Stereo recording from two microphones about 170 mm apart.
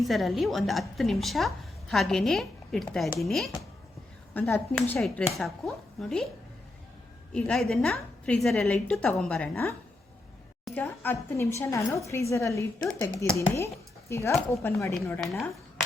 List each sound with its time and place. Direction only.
0.0 s a woman's voice: centre (ahead or behind)
4.4 s a woman's voice: 10° left (ahead or behind)
4.9 s a woman's voice: centre (ahead or behind)
7.3 s a woman's voice: 5° left (ahead or behind)
10.8 s a woman's voice: 10° left (ahead or behind)
14.9 s a woman's voice: centre (ahead or behind)